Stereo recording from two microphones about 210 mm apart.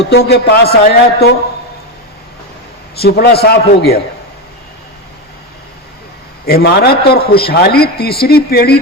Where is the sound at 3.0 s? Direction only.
50° left (ahead or behind).